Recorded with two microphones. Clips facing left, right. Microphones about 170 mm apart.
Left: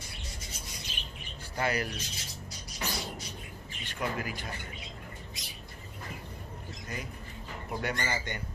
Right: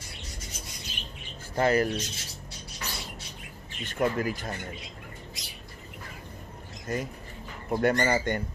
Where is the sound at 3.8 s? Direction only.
45° right (ahead or behind).